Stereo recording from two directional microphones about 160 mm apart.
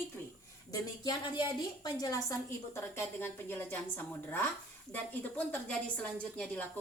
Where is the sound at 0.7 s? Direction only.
25° left (ahead or behind).